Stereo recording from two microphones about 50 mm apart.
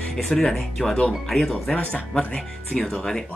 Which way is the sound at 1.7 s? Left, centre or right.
Centre.